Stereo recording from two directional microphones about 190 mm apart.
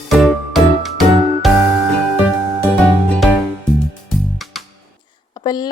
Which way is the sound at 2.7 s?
5° left (ahead or behind).